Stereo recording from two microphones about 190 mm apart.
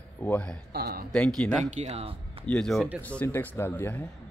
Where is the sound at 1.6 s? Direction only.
35° right (ahead or behind).